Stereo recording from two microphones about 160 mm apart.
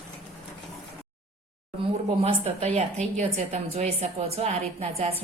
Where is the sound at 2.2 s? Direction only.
40° right (ahead or behind).